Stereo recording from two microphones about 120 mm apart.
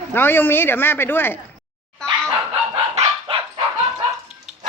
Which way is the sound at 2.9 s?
50° right (ahead or behind).